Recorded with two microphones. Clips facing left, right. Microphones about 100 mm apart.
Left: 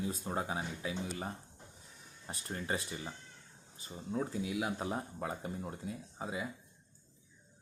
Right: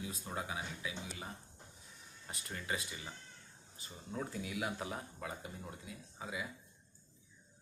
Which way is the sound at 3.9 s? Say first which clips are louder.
Left 6 dB; 20° left (ahead or behind).